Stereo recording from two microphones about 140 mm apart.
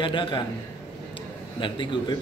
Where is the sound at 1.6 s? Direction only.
35° left (ahead or behind).